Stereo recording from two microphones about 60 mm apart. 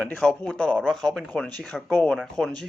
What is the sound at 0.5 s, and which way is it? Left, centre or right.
Speech, centre.